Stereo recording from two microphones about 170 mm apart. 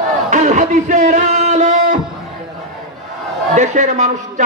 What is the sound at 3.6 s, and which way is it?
Speech, 45° right (ahead or behind).